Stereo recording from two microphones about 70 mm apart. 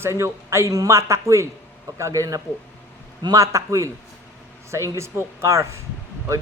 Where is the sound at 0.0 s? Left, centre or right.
Right.